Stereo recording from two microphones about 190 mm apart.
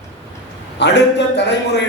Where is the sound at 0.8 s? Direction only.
65° left (ahead or behind).